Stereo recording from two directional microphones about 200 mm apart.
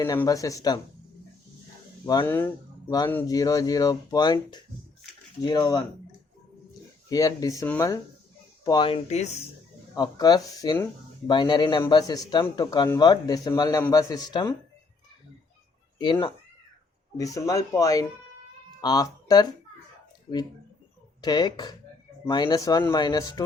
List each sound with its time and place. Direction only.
0.0 s speech: 15° left (ahead or behind)
2.0 s a man's voice: 15° left (ahead or behind)
7.1 s a man's voice: 15° left (ahead or behind); by 9.3 s 35° left (ahead or behind)
9.9 s a man's voice: 20° left (ahead or behind)
17.2 s speech: 15° left (ahead or behind)
21.2 s a man's voice: 20° left (ahead or behind)